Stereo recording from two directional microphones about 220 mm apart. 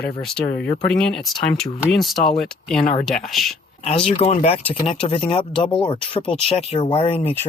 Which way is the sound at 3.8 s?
25° left (ahead or behind).